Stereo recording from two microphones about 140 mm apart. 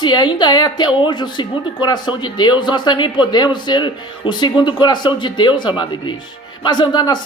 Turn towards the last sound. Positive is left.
turn(degrees=30)  # may be behind; listen again after turning